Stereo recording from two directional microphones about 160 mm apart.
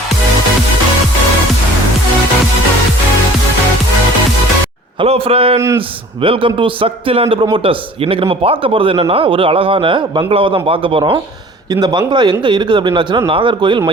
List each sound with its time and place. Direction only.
4.9 s a man's voice: 35° right (ahead or behind)
5.5 s speech: 20° right (ahead or behind)
6.2 s a man's voice: 35° right (ahead or behind)